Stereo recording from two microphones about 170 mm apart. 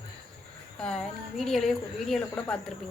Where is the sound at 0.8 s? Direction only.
5° left (ahead or behind).